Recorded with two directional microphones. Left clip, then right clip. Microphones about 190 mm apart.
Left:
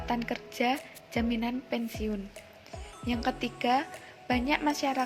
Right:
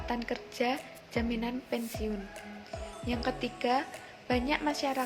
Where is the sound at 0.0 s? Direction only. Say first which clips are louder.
Left 2 dB; 45° left (ahead or behind).